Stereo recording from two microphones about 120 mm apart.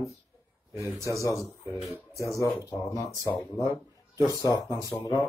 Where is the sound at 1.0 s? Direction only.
25° left (ahead or behind).